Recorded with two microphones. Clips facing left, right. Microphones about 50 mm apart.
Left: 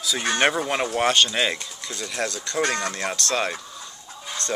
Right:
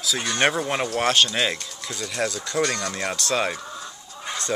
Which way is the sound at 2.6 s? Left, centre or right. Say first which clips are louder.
Left 3 dB; left.